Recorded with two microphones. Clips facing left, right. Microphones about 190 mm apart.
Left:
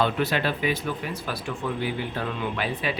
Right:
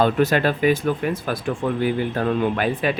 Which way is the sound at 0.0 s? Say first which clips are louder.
Right 6 dB; 45° right (ahead or behind).